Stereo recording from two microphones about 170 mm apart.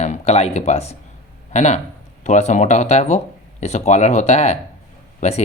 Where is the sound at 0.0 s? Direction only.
40° left (ahead or behind).